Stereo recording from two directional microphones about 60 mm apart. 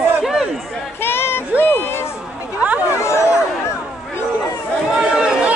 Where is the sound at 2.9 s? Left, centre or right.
Left.